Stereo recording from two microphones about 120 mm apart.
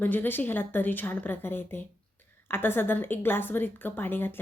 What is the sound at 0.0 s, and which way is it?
A woman's voice, 15° left (ahead or behind).